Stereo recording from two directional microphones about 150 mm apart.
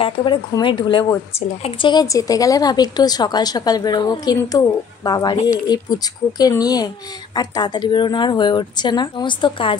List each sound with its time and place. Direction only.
0.0 s speech: 35° left (ahead or behind)